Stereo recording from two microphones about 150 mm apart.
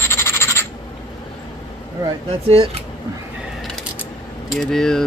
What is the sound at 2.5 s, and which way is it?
Speech, 40° right (ahead or behind).